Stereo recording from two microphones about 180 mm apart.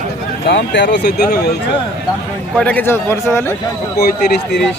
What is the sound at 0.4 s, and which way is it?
Speech, 75° left (ahead or behind).